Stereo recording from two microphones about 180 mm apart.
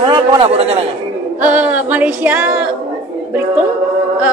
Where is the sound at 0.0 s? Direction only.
25° right (ahead or behind).